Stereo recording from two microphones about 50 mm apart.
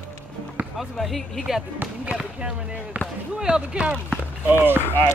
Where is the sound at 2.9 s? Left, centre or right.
Right.